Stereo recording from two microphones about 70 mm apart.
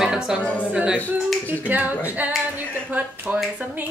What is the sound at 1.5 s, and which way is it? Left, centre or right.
Speech, right.